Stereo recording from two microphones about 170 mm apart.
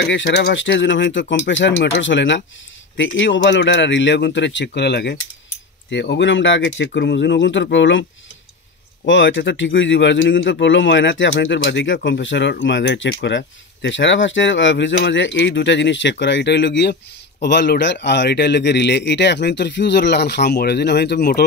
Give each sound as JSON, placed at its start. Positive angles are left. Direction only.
{"t": 0.0, "sound": "speech", "side_deg": 90}
{"t": 5.9, "sound": "speech", "side_deg": 90}
{"t": 9.0, "sound": "a man's voice", "side_deg": 90}